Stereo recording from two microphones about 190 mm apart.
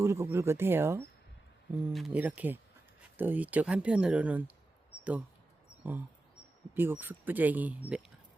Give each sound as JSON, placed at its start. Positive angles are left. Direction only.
{"t": 0.0, "sound": "speech", "side_deg": -15}
{"t": 1.7, "sound": "speech", "side_deg": 0}
{"t": 5.8, "sound": "speech", "side_deg": -10}